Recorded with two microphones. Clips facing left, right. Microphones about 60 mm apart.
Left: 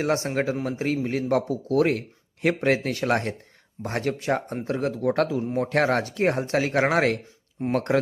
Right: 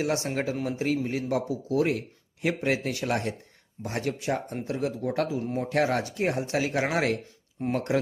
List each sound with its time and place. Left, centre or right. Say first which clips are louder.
0.0 s speech: left 3 dB; left